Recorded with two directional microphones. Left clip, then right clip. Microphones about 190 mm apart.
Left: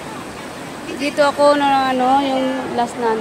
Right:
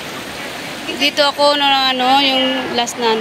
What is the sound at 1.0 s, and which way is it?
Speech, 10° left (ahead or behind).